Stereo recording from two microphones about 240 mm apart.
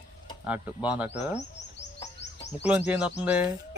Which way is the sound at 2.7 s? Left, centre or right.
Centre.